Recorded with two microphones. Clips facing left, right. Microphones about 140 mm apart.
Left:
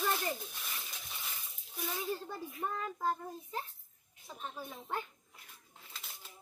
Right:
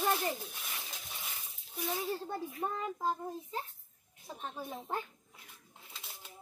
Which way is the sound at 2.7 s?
10° right (ahead or behind).